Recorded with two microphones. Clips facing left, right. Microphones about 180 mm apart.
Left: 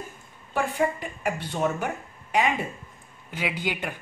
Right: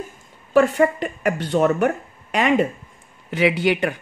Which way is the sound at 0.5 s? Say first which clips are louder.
Right 9 dB; 80° right.